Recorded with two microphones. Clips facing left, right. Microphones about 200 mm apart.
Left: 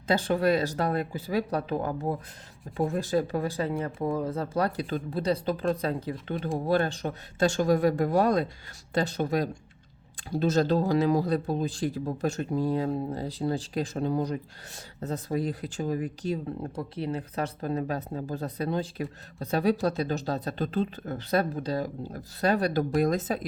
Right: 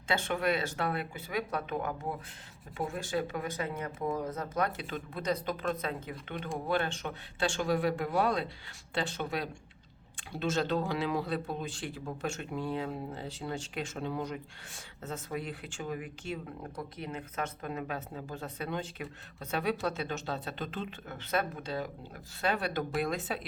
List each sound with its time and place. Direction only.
0.1 s speech: 35° left (ahead or behind)